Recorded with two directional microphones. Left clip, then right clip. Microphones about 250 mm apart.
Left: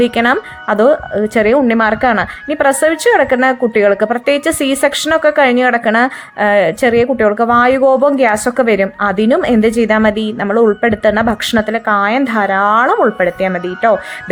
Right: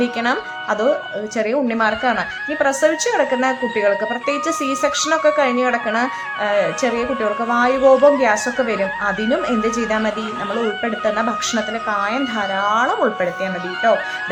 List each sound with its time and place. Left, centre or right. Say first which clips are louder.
0.0 s a woman's voice: left 7 dB; left